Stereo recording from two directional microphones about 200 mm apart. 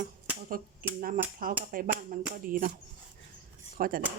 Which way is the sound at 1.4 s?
45° right (ahead or behind).